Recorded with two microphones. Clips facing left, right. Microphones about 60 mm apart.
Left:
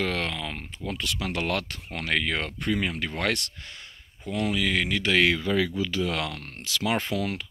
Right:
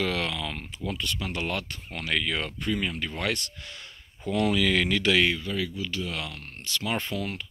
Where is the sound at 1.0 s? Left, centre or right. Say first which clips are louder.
Left 4 dB; left.